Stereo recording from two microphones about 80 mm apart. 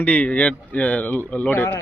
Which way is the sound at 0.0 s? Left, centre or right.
Centre.